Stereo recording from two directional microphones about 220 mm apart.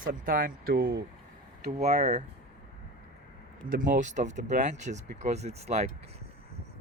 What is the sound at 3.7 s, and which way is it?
Speech, 35° right (ahead or behind).